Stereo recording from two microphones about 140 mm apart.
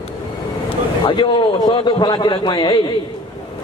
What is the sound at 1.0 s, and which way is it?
A man's voice, 35° left (ahead or behind).